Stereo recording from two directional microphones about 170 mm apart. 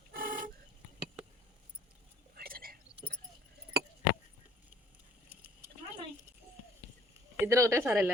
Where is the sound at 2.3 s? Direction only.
60° right (ahead or behind).